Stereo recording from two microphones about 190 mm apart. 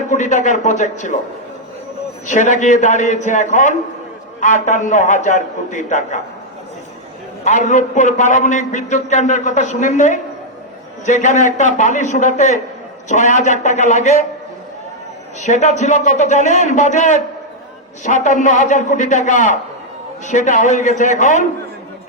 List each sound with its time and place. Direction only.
0.1 s a man's voice: 40° left (ahead or behind)
2.2 s a man's voice: 40° left (ahead or behind)
7.4 s a man's voice: 40° left (ahead or behind)
15.4 s a man's voice: 40° left (ahead or behind)